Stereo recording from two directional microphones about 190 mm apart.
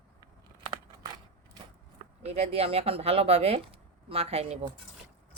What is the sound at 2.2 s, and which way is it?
Speech, 35° right (ahead or behind).